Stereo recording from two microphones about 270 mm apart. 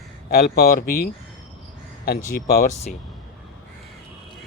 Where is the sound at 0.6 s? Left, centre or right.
Left.